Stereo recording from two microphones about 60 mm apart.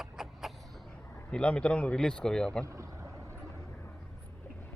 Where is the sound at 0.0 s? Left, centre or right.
Centre.